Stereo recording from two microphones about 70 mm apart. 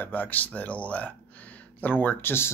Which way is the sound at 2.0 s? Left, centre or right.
Left.